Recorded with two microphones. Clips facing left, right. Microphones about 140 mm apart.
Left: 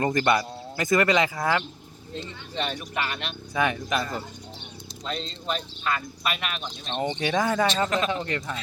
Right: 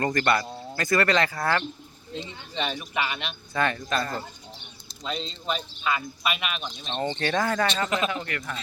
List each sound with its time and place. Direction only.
0.1 s speech: 15° left (ahead or behind)
2.1 s speech: 5° right (ahead or behind)
3.5 s speech: 10° left (ahead or behind)
5.0 s speech: 5° right (ahead or behind)
6.9 s speech: 15° left (ahead or behind)
8.1 s a man's voice: 25° left (ahead or behind)